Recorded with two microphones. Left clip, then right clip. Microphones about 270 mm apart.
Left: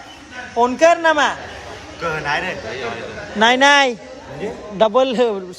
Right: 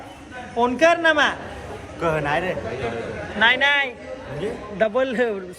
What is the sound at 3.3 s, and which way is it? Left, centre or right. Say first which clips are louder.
A man's voice: left 5 dB; left.